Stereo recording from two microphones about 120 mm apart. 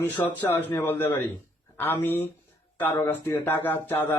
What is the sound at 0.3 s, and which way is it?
A man's voice, 15° left (ahead or behind).